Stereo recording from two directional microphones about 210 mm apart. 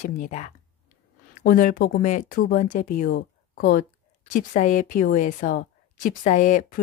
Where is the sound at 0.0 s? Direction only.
35° left (ahead or behind).